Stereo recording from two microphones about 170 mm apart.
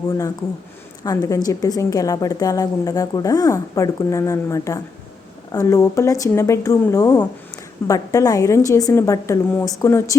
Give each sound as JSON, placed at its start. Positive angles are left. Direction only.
{"t": 1.0, "sound": "a woman's voice", "side_deg": 20}